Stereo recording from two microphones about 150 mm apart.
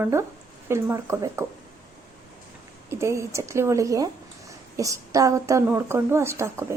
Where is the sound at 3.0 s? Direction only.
20° right (ahead or behind).